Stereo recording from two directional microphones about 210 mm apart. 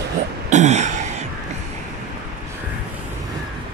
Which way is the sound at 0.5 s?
35° right (ahead or behind).